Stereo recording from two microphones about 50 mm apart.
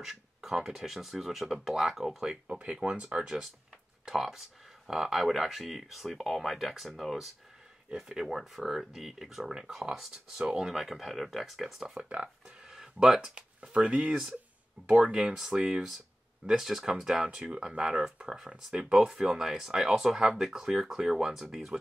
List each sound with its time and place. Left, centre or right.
0.0 s speech: centre
2.4 s speech: right; by 7.2 s centre
7.9 s speech: centre
12.4 s a sound: centre
13.3 s speech: right
15.2 s speech: centre